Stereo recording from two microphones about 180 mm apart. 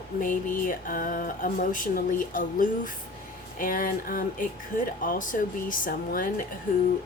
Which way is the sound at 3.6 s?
50° left (ahead or behind).